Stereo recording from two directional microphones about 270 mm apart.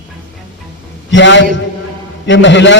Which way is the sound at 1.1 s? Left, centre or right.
Left.